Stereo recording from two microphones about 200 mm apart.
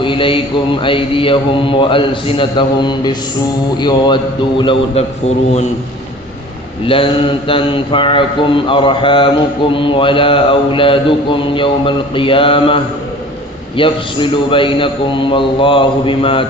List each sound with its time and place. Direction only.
0.0 s mantra: 25° left (ahead or behind)
6.8 s mantra: 25° left (ahead or behind)